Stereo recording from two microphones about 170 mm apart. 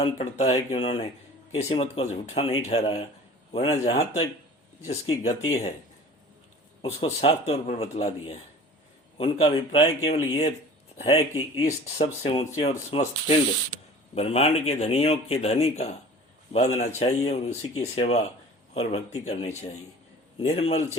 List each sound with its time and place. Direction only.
0.0 s speech: 35° left (ahead or behind)
6.8 s speech: 35° left (ahead or behind)